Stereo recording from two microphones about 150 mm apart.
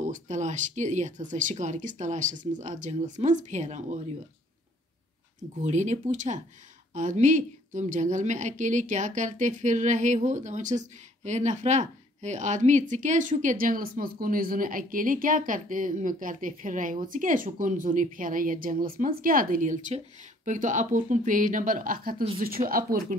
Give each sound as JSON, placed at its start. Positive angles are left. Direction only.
{"t": 0.0, "sound": "a woman's voice", "side_deg": -55}
{"t": 5.6, "sound": "a woman's voice", "side_deg": -50}